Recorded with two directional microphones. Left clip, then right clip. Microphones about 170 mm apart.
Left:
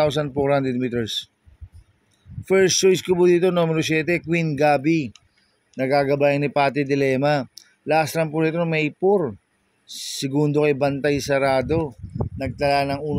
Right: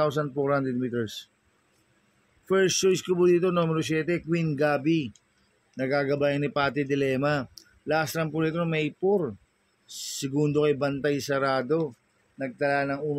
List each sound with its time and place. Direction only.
0.0 s speech: 35° left (ahead or behind)
2.4 s speech: 35° left (ahead or behind)
12.4 s speech: 45° left (ahead or behind)